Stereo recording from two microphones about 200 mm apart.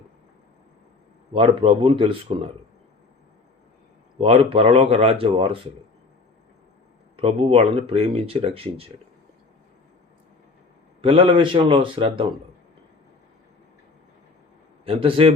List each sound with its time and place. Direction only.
1.3 s speech: 30° right (ahead or behind)
4.2 s speech: 30° right (ahead or behind)
7.2 s speech: 25° right (ahead or behind)
11.0 s speech: 25° right (ahead or behind)
14.8 s speech: 30° right (ahead or behind)